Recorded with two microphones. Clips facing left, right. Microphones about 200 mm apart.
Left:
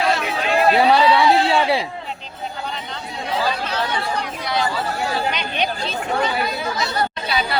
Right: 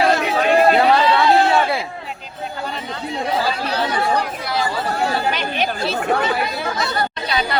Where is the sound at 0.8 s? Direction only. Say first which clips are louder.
Even; 15° left (ahead or behind).